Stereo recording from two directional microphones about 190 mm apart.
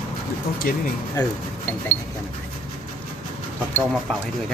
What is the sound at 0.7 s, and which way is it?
Speech, 50° left (ahead or behind).